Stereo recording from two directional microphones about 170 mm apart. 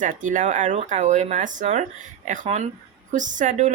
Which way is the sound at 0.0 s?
50° right (ahead or behind).